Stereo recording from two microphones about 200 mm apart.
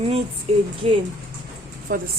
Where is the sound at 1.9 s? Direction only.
45° right (ahead or behind).